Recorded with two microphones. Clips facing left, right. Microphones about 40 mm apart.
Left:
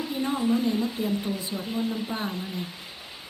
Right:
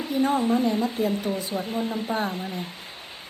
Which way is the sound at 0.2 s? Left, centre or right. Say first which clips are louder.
Right 4 dB; right.